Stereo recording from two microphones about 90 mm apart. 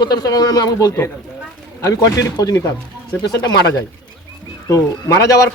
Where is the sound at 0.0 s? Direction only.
45° left (ahead or behind).